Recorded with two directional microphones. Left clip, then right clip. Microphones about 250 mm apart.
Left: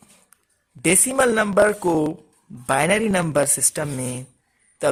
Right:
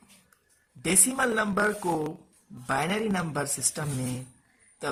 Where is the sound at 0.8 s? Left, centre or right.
Left.